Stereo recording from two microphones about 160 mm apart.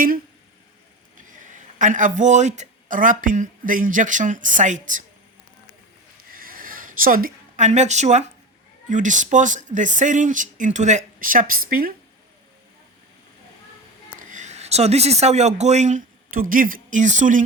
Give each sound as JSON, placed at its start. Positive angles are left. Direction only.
{"t": 1.3, "sound": "a man's voice", "side_deg": -55}
{"t": 6.3, "sound": "a sound", "side_deg": -65}
{"t": 8.9, "sound": "speech", "side_deg": -50}
{"t": 14.2, "sound": "speech", "side_deg": -50}